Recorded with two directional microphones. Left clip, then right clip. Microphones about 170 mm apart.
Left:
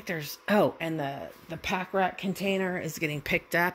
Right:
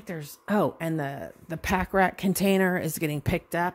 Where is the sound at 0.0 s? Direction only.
5° right (ahead or behind).